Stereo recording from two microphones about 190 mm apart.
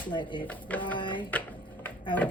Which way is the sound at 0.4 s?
10° left (ahead or behind).